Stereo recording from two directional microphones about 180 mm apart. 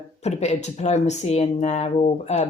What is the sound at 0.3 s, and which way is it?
Speech, 40° left (ahead or behind).